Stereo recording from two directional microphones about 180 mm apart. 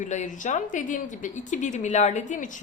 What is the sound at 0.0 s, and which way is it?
A woman's voice, 45° left (ahead or behind).